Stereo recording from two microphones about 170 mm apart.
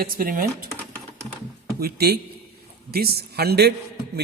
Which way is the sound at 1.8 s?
70° right (ahead or behind).